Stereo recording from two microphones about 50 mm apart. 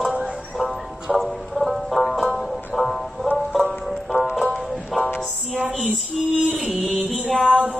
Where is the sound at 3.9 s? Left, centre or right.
Centre.